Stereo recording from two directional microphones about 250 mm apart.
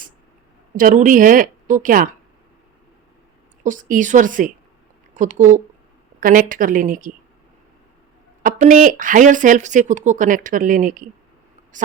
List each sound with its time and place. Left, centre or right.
0.8 s speech: right
3.6 s speech: right
8.4 s speech: right